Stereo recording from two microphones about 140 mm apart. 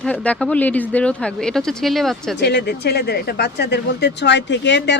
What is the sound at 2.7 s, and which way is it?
Speech, 90° left.